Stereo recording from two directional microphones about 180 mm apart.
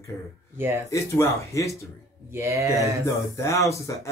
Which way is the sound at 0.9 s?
15° left (ahead or behind).